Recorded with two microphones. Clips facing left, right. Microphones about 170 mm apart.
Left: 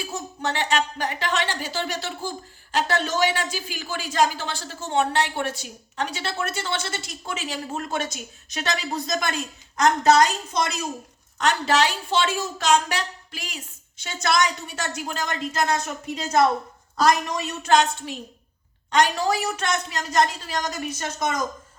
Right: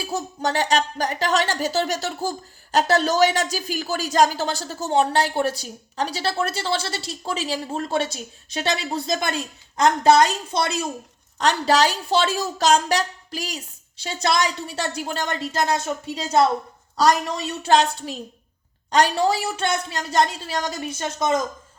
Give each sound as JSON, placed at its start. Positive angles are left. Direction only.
{"t": 0.0, "sound": "speech", "side_deg": -35}